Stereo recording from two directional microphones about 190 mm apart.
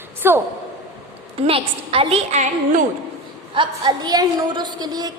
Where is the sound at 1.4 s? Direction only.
30° right (ahead or behind).